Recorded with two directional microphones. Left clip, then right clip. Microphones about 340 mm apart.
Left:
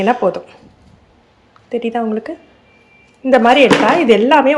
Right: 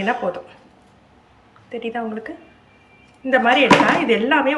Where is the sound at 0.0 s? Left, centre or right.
Centre.